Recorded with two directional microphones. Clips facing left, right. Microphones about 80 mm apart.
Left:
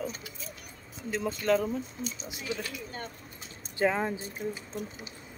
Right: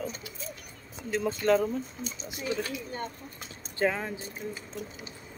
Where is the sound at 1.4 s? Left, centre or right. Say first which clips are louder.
Right 2 dB; centre.